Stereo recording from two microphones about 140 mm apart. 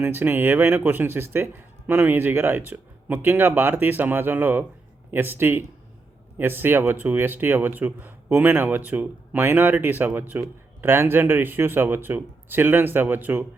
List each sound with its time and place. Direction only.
0.0 s speech: 15° right (ahead or behind)